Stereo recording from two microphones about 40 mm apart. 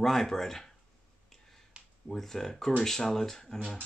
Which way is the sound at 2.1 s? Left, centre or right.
Centre.